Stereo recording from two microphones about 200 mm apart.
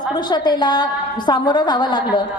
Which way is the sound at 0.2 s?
20° left (ahead or behind).